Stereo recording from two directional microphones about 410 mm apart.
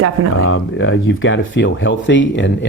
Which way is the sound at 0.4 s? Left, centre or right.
Left.